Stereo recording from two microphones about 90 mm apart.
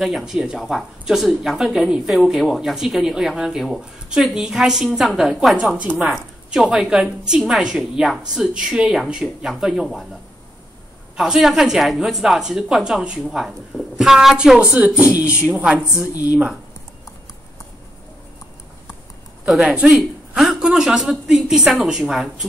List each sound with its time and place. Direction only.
0.0 s speech: 5° right (ahead or behind)
11.1 s speech: 5° right (ahead or behind)
19.4 s speech: 10° right (ahead or behind)